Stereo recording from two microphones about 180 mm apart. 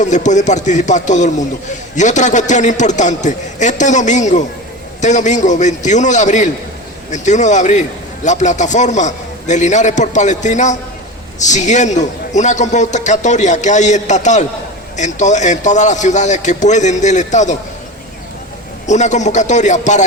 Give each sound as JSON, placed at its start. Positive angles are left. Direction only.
{"t": 0.0, "sound": "a man's voice", "side_deg": 40}
{"t": 18.9, "sound": "a man's voice", "side_deg": 40}